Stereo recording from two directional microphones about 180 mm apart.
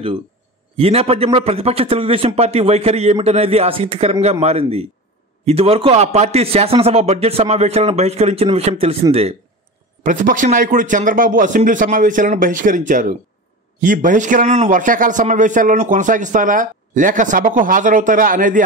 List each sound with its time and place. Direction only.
0.7 s a man's voice: 35° right (ahead or behind)
10.0 s speech: 45° right (ahead or behind)